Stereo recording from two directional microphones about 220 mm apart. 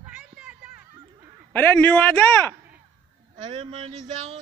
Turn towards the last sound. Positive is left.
turn(degrees=-25)  # may be behind; listen again after turning